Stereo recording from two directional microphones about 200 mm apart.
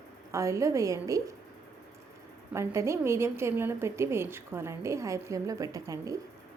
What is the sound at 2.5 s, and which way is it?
A woman's voice, 15° right (ahead or behind).